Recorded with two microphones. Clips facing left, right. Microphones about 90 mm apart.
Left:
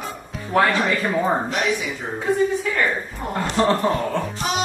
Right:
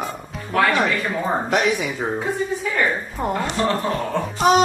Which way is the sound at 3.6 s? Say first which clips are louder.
Left 4 dB; 30° left (ahead or behind).